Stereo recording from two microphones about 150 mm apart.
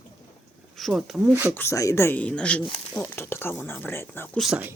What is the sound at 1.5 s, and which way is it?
Speech, 15° left (ahead or behind).